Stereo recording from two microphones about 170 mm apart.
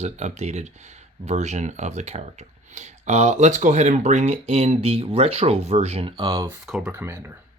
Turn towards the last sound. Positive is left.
turn(degrees=-5)  # may be behind; listen again after turning